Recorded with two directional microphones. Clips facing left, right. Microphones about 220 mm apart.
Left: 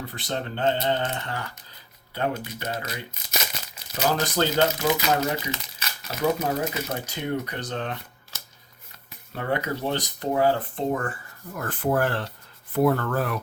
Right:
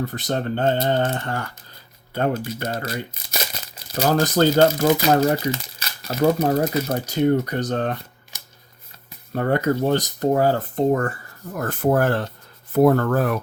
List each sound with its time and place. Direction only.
0.0 s speech: 45° right (ahead or behind)
4.0 s speech: 45° right (ahead or behind)
8.3 s shuffling cards: 15° right (ahead or behind)
9.3 s speech: 45° right (ahead or behind)